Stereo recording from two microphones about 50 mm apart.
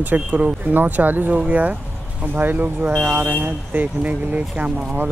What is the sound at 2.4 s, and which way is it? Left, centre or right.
Speech, right.